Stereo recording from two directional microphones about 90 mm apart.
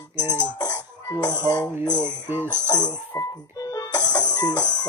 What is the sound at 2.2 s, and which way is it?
Speech, 25° right (ahead or behind).